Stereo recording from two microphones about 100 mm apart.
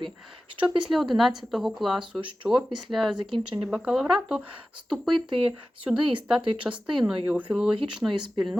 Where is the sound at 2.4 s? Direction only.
10° right (ahead or behind).